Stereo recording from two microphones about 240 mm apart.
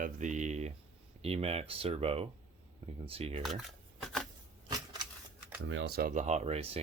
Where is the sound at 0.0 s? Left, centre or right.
Right.